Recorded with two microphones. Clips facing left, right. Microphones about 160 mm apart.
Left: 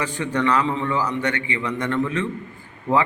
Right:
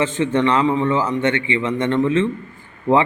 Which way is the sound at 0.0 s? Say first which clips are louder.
Right 5 dB; 20° right (ahead or behind).